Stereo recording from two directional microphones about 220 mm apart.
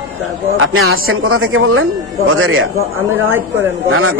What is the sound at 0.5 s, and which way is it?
Speech, 70° right (ahead or behind).